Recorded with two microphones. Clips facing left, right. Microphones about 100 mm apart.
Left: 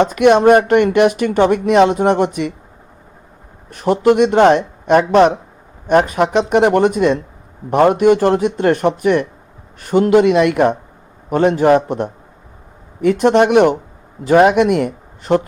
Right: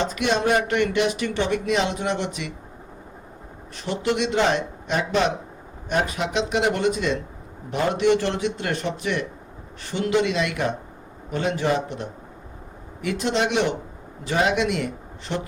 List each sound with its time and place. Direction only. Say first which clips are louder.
0.0 s speech: left 12 dB; 55° left (ahead or behind)
3.7 s a man's voice: left 12 dB; 50° left (ahead or behind)